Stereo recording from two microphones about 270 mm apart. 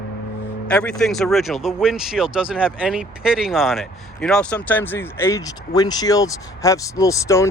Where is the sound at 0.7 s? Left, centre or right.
Centre.